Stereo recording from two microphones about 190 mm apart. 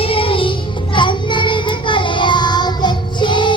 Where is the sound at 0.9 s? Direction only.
25° left (ahead or behind).